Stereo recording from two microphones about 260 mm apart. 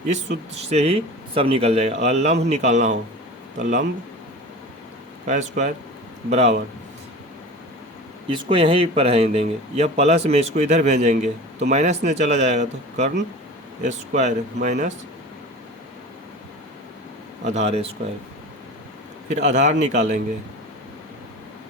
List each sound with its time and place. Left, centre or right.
0.5 s speech: right
5.2 s speech: right
8.3 s speech: centre
17.4 s speech: right
19.3 s speech: right